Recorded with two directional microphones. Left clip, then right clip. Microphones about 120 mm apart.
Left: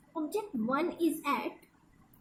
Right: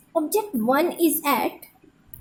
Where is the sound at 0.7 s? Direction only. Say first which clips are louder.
Right 11 dB; 90° right.